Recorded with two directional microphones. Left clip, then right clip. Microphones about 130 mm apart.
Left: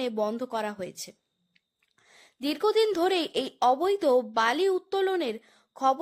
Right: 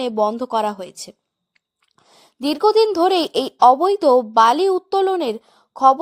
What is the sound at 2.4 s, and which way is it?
A woman's voice, 35° right (ahead or behind).